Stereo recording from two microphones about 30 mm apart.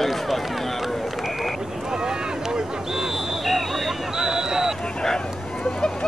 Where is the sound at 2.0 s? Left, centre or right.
Right.